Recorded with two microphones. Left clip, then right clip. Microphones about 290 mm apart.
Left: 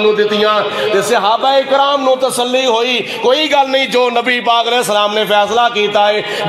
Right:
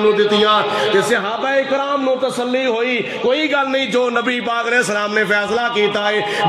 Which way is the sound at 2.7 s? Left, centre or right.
Left.